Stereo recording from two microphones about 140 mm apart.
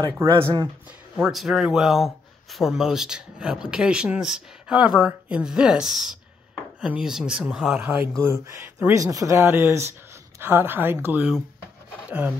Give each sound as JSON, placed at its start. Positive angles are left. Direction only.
{"t": 0.2, "sound": "speech", "side_deg": -20}
{"t": 1.1, "sound": "speech", "side_deg": 0}
{"t": 8.2, "sound": "a woman's voice", "side_deg": -15}